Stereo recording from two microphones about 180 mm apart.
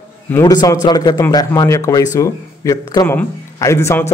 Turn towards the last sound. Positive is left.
turn(degrees=15)  # may be behind; listen again after turning